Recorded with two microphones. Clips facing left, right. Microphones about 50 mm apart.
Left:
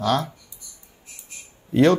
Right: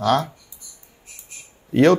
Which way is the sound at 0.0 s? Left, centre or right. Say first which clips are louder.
Right 3 dB; right.